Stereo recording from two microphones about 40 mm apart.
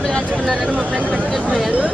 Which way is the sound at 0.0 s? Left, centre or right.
Centre.